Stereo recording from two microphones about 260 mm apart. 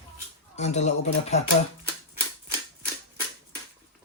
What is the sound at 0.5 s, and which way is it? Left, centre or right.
Speech, left.